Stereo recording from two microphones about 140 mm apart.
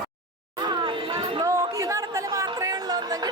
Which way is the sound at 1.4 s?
25° right (ahead or behind).